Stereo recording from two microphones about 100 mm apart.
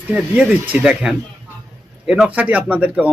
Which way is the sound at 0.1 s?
10° right (ahead or behind).